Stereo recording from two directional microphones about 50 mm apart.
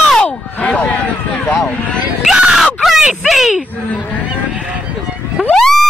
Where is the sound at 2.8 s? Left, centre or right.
Centre.